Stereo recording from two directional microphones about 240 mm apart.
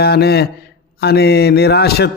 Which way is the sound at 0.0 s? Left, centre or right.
Left.